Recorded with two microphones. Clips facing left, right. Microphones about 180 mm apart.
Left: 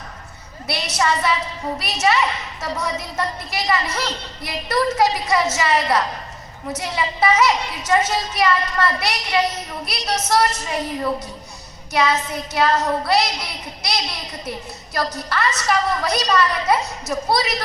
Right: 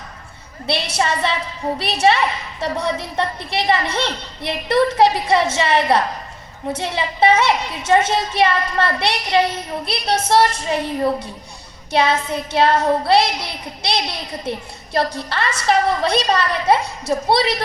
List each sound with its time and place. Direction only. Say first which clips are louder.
0.7 s a woman's voice: right 1 dB; 30° right (ahead or behind)